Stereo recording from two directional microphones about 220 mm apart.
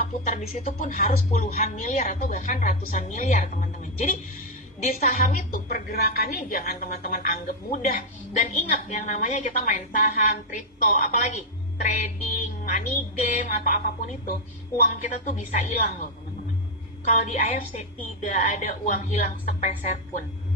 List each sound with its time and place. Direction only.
0.3 s a woman's voice: 30° left (ahead or behind)
14.8 s a woman's voice: 35° left (ahead or behind)
17.1 s a woman's voice: 35° left (ahead or behind)